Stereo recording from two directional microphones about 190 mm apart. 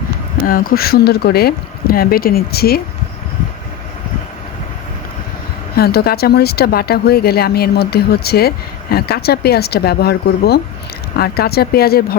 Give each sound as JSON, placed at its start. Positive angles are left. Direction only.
{"t": 0.4, "sound": "speech", "side_deg": 50}
{"t": 5.7, "sound": "speech", "side_deg": 55}